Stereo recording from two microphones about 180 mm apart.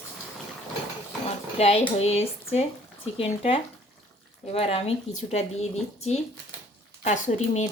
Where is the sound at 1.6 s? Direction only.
35° left (ahead or behind).